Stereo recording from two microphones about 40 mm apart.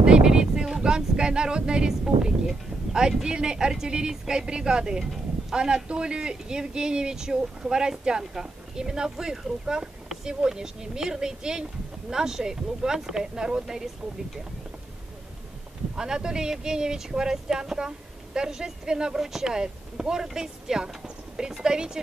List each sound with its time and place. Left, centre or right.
0.0 s a sound: right
3.5 s speech: centre
16.0 s speech: centre